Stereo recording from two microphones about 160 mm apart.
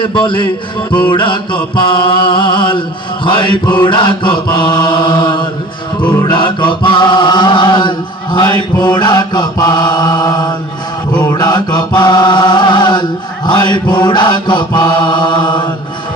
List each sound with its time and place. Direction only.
0.0 s mantra: 30° left (ahead or behind)
3.8 s chant: 30° left (ahead or behind)